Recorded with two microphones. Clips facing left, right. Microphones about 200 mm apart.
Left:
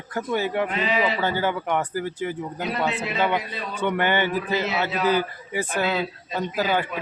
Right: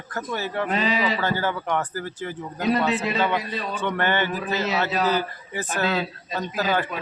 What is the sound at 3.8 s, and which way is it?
Speech, 10° left (ahead or behind).